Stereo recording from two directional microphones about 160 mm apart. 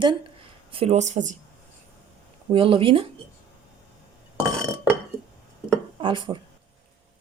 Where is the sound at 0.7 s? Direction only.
40° right (ahead or behind).